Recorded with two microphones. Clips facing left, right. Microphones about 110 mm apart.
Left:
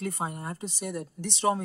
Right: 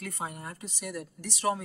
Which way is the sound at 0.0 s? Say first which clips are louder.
Left 5 dB; 30° left (ahead or behind).